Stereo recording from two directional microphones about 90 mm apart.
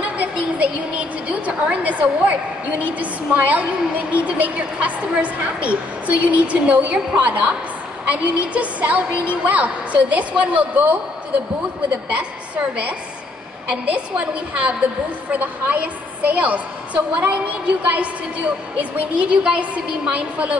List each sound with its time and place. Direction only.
0.2 s a sound: 15° right (ahead or behind)
3.0 s a woman's voice: 15° right (ahead or behind)
12.1 s a woman's voice: 15° right (ahead or behind)